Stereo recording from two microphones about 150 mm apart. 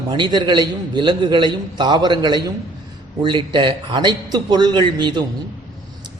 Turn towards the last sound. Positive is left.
turn(degrees=-30)  # may be behind; listen again after turning